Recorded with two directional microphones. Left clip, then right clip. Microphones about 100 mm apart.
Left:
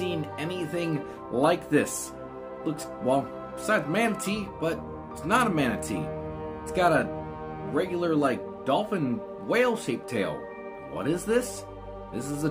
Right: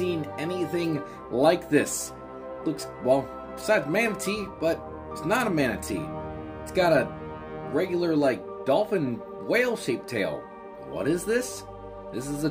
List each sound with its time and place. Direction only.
0.1 s music: 15° left (ahead or behind)
1.3 s speech: 15° left (ahead or behind)
3.6 s speech: 15° left (ahead or behind)